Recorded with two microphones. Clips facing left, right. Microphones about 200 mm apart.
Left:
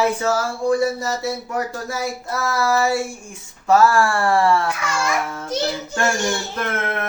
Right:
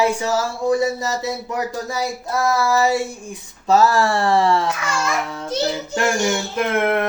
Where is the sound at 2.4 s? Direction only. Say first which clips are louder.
Right 1 dB; 20° right (ahead or behind).